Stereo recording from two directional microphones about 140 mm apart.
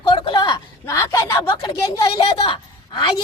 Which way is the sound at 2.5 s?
35° left (ahead or behind).